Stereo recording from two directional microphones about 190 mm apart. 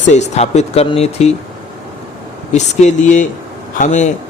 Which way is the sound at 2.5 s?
35° left (ahead or behind).